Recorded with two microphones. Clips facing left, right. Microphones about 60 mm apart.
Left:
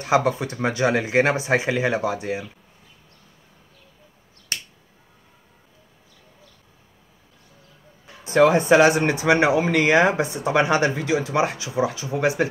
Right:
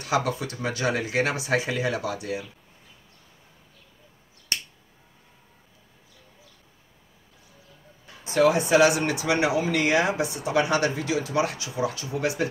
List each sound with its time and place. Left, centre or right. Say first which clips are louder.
0.0 s speech: left 5 dB; left
8.2 s speech: left 4 dB; left